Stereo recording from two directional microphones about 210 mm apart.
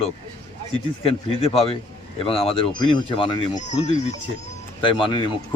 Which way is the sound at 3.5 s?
35° left (ahead or behind).